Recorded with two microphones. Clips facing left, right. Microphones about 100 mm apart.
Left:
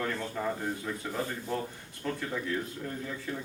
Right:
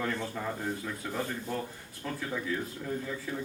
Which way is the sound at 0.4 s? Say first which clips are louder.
Left 3 dB; centre (ahead or behind).